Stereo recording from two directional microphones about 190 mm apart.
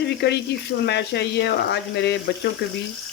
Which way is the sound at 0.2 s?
60° left (ahead or behind).